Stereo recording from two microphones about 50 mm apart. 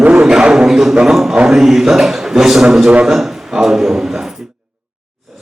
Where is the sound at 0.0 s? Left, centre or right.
Right.